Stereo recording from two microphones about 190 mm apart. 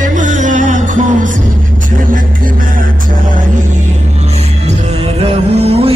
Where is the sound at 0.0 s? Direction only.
40° right (ahead or behind).